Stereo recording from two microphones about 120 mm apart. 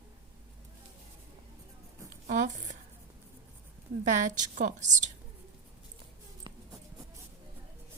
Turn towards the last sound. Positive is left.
turn(degrees=-40)  # may be behind; listen again after turning